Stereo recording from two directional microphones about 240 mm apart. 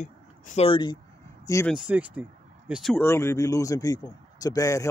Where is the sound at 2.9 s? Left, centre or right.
Centre.